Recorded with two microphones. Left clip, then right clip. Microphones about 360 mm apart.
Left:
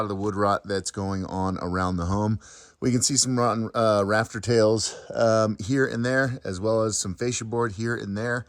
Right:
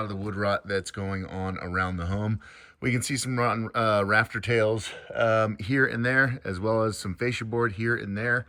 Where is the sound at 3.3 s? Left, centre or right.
Centre.